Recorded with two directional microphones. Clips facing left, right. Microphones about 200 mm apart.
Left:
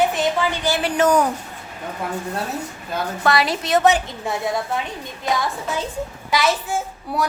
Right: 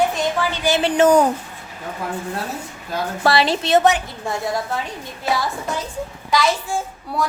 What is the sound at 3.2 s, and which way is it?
Speech, 30° right (ahead or behind).